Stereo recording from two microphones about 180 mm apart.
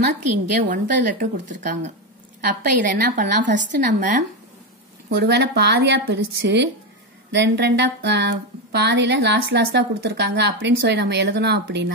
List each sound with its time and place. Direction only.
0.7 s a woman's voice: 45° right (ahead or behind)
5.1 s speech: 65° right (ahead or behind)